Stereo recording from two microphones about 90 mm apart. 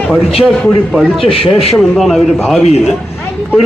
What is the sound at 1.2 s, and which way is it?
Speech, 90° left.